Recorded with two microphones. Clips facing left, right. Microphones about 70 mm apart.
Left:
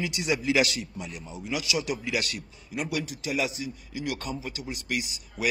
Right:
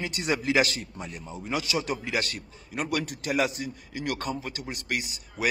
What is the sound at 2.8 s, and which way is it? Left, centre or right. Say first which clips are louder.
A man's voice: right 3 dB; right.